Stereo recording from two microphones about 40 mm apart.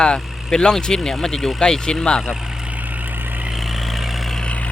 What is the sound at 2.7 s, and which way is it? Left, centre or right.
Vehicle, right.